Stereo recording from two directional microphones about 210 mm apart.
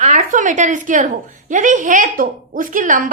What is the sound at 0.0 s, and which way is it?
A woman's voice, 35° right (ahead or behind).